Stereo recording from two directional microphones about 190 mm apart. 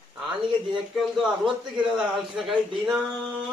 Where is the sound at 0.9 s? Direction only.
Centre (ahead or behind).